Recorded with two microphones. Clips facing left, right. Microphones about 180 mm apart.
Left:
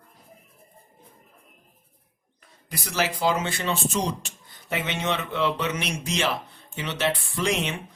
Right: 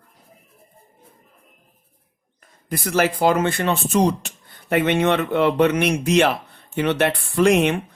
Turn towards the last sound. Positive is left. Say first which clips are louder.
# right 10 dB
turn(degrees=-60)  # may be behind; listen again after turning